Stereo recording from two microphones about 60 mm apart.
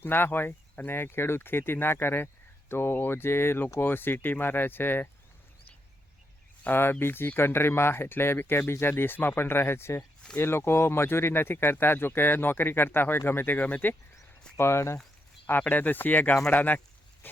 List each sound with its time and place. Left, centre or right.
0.0 s speech: left
6.7 s speech: left
14.6 s speech: left
15.7 s speech: left
17.2 s dog: left